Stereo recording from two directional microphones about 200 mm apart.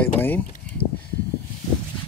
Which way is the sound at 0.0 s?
10° left (ahead or behind).